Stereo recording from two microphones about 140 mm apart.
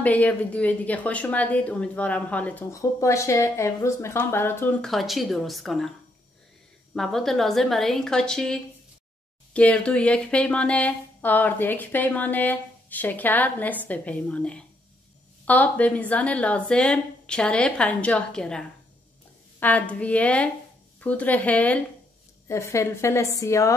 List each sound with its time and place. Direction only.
0.0 s speech: 10° left (ahead or behind)
2.7 s speech: 20° left (ahead or behind)
4.8 s a woman's voice: centre (ahead or behind); by 23.7 s 20° left (ahead or behind)